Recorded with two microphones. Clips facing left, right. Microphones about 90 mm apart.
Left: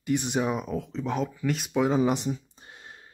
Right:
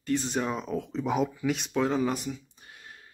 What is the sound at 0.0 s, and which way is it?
Speech, 15° left (ahead or behind).